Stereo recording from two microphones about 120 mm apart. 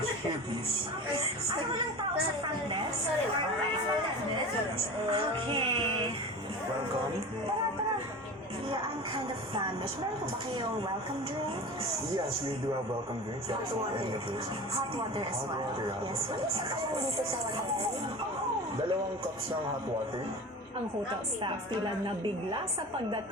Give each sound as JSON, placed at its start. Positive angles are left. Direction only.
{"t": 5.1, "sound": "music", "side_deg": -45}